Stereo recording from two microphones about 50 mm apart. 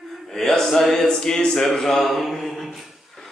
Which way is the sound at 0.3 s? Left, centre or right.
Centre.